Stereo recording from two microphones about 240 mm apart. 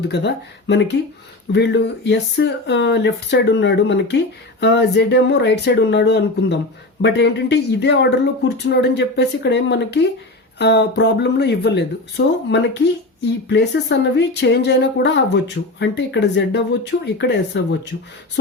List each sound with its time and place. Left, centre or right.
0.1 s speech: left